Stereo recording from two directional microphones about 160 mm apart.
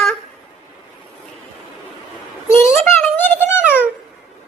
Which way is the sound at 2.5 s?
15° left (ahead or behind).